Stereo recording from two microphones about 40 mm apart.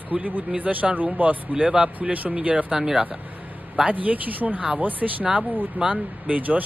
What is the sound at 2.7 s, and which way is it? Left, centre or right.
Speech, centre.